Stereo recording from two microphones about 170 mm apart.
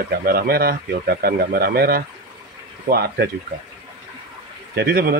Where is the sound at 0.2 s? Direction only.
60° right (ahead or behind).